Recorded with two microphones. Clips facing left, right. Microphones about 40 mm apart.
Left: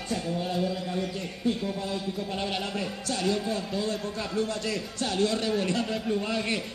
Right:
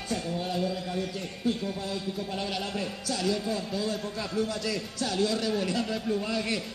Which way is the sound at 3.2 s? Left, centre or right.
Left.